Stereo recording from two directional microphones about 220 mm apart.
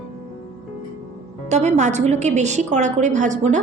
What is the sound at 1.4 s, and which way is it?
A woman's voice, 30° right (ahead or behind).